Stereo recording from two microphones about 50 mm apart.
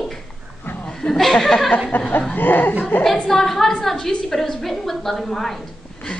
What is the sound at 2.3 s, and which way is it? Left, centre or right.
Speech, left.